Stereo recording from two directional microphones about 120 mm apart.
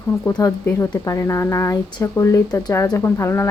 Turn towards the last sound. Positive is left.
turn(degrees=20)  # may be behind; listen again after turning